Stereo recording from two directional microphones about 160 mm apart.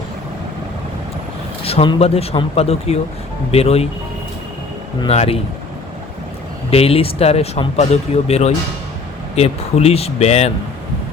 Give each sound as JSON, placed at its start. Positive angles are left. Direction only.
{"t": 1.6, "sound": "speech", "side_deg": 35}
{"t": 4.9, "sound": "speech", "side_deg": 40}
{"t": 6.7, "sound": "speech", "side_deg": 40}